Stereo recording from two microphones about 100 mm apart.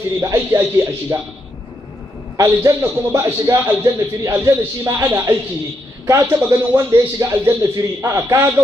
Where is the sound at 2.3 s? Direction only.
30° right (ahead or behind).